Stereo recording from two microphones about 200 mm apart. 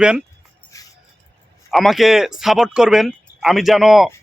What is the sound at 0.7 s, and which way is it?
Music, 15° left (ahead or behind).